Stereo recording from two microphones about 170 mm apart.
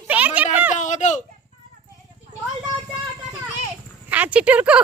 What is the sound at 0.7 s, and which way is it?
Speech, 45° left (ahead or behind).